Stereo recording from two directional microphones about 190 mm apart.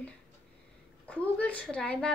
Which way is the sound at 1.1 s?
5° left (ahead or behind).